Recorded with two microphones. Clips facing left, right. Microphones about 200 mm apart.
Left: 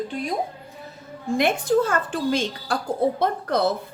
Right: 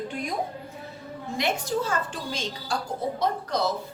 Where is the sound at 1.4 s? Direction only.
55° left (ahead or behind).